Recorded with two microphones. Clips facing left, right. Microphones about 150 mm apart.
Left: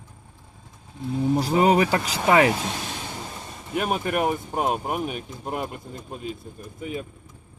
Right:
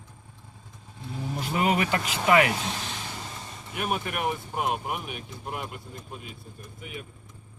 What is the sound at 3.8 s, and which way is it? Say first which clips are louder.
Speech: left 6 dB; 45° left (ahead or behind).